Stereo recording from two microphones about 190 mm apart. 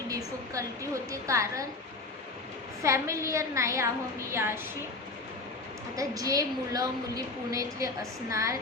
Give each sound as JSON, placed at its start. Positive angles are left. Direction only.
{"t": 0.5, "sound": "a woman's voice", "side_deg": -15}
{"t": 2.8, "sound": "a woman's voice", "side_deg": -15}
{"t": 6.0, "sound": "a woman's voice", "side_deg": -15}